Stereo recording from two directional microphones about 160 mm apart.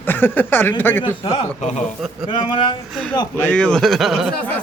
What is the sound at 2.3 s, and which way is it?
Speech, 30° left (ahead or behind).